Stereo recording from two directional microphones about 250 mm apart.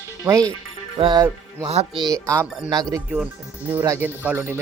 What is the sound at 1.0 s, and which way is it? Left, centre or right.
Music, centre.